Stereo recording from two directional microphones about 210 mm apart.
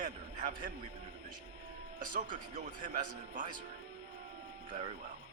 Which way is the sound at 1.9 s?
40° right (ahead or behind).